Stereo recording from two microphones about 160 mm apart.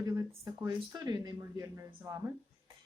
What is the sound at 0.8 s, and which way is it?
Speech, 25° right (ahead or behind).